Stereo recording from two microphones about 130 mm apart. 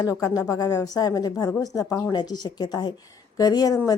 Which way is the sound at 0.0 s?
30° left (ahead or behind).